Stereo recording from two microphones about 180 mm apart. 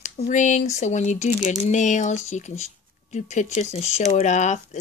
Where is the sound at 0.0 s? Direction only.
40° left (ahead or behind).